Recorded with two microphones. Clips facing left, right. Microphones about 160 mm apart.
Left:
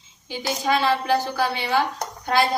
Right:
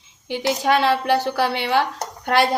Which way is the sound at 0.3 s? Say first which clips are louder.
Right 4 dB; 65° right (ahead or behind).